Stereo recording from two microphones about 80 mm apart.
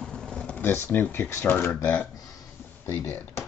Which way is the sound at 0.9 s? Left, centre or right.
Left.